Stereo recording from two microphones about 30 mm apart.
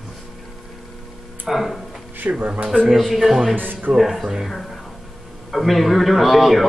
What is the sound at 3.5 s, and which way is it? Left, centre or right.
Speech, right.